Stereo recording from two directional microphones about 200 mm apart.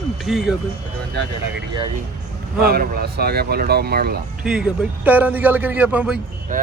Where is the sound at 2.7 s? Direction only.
50° right (ahead or behind).